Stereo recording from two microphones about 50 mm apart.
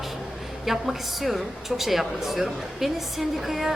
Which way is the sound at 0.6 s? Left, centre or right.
Centre.